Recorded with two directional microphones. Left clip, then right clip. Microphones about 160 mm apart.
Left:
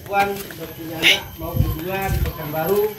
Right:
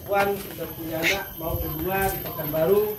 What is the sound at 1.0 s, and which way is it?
Speech, 15° left (ahead or behind).